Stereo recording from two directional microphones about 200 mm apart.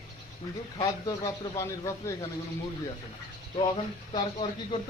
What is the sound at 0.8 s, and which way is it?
A man's voice, 15° left (ahead or behind).